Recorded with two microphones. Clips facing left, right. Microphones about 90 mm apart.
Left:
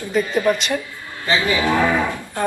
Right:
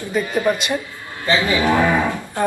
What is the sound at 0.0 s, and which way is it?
A man's voice, 20° right (ahead or behind).